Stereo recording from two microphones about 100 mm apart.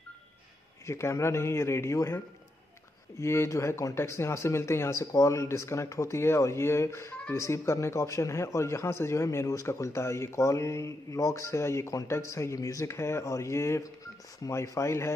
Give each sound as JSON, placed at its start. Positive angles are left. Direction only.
{"t": 0.8, "sound": "speech", "side_deg": 25}